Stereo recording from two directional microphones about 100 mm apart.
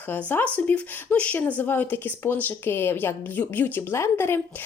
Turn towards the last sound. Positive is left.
turn(degrees=25)  # may be behind; listen again after turning